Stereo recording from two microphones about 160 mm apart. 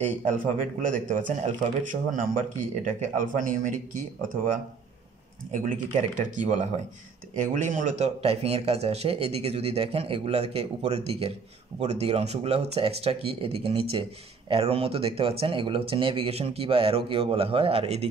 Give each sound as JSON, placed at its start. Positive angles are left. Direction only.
{"t": 0.0, "sound": "speech", "side_deg": -50}
{"t": 5.5, "sound": "speech", "side_deg": -50}